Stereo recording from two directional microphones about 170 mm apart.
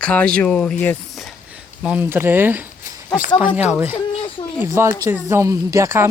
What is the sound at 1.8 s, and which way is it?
Speech, 10° right (ahead or behind).